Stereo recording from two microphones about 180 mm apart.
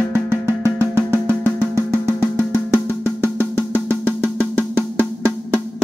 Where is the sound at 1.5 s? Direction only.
15° right (ahead or behind).